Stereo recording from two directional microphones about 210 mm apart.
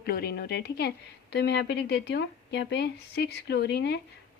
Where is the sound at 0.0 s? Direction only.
50° left (ahead or behind).